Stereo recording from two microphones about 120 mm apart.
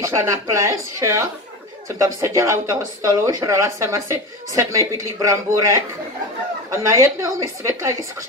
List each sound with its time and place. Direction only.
0.0 s speech: 25° right (ahead or behind)
6.7 s speech: 25° right (ahead or behind)